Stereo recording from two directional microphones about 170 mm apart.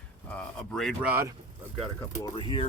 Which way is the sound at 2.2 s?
30° left (ahead or behind).